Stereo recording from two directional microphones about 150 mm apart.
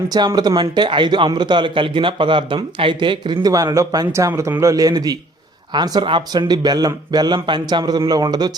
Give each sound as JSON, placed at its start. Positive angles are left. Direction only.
{"t": 0.1, "sound": "a man's voice", "side_deg": -25}